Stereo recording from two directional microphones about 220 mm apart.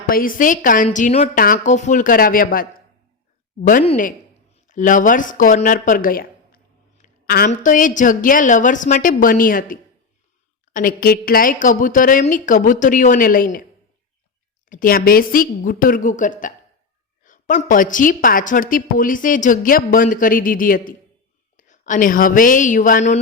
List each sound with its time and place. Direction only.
0.1 s a woman's voice: 40° left (ahead or behind)
14.7 s a woman's voice: 40° left (ahead or behind)